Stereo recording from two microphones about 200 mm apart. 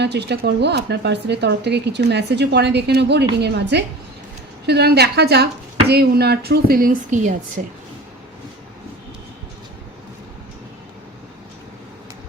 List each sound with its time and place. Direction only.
0.0 s a woman's voice: 55° right (ahead or behind); by 7.6 s 40° right (ahead or behind)